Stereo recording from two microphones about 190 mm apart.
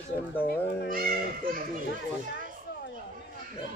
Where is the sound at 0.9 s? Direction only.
50° right (ahead or behind).